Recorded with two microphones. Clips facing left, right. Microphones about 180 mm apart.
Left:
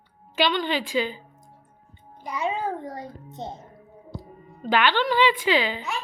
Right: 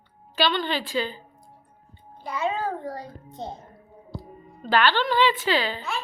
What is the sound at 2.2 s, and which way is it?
A child's voice, 15° left (ahead or behind).